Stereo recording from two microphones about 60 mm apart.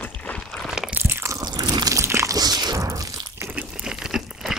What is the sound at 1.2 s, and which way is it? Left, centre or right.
Biting, right.